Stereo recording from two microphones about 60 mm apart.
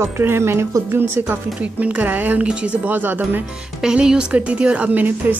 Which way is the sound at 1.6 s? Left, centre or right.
Right.